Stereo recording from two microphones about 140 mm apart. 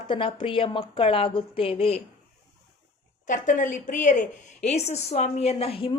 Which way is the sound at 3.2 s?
65° left (ahead or behind).